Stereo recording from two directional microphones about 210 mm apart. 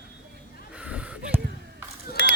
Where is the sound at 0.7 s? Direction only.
5° right (ahead or behind).